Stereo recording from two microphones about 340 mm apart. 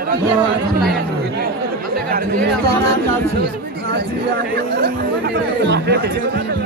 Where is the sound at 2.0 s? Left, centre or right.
Right.